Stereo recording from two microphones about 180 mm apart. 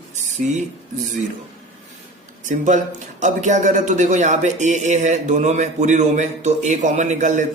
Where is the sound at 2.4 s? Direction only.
45° right (ahead or behind).